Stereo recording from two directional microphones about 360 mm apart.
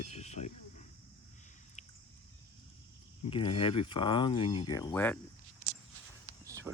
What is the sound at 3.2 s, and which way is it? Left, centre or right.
Speech, centre.